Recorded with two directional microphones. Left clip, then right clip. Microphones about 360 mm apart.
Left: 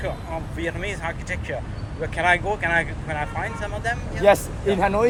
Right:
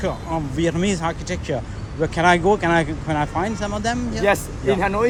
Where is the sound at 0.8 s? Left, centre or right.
Centre.